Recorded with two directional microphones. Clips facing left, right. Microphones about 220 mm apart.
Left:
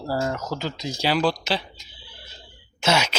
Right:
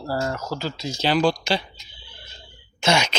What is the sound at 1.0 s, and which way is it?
Speech, 5° left (ahead or behind).